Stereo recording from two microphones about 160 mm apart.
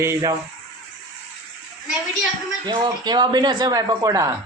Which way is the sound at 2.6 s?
25° right (ahead or behind).